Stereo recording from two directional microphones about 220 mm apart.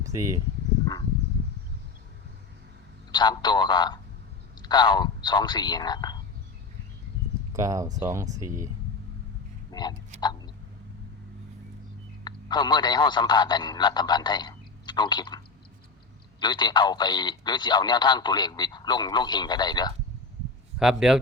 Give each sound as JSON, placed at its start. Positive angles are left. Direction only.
{"t": 3.1, "sound": "a man's voice", "side_deg": 20}
{"t": 7.5, "sound": "speech", "side_deg": -15}
{"t": 9.7, "sound": "a sound", "side_deg": 20}
{"t": 12.2, "sound": "speech", "side_deg": 20}
{"t": 16.4, "sound": "a man's voice", "side_deg": 20}
{"t": 20.7, "sound": "speech", "side_deg": 0}